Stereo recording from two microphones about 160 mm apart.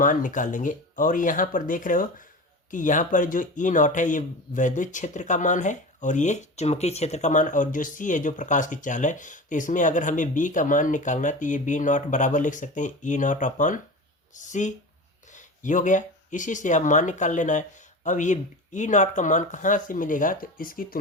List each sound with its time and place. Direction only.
0.0 s speech: 55° left (ahead or behind)